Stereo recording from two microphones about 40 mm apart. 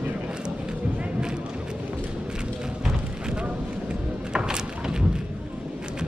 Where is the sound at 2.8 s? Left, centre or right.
Right.